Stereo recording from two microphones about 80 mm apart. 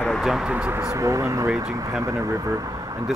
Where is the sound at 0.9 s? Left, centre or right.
Right.